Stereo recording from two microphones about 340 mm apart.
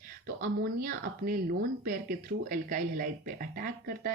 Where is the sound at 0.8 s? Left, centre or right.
Right.